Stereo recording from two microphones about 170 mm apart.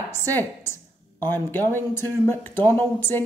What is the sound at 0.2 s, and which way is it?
A woman's voice, 15° left (ahead or behind).